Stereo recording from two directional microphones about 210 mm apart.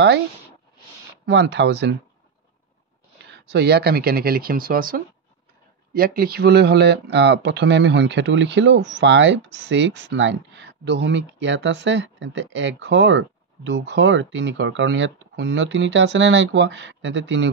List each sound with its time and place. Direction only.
1.2 s speech: 55° right (ahead or behind)
3.3 s speech: 50° right (ahead or behind)